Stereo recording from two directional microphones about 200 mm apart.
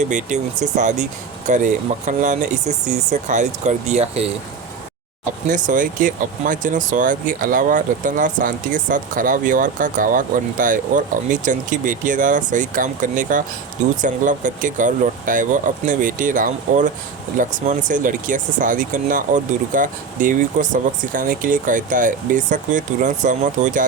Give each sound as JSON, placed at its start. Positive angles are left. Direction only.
{"t": 0.0, "sound": "speech", "side_deg": -40}
{"t": 5.5, "sound": "speech", "side_deg": -40}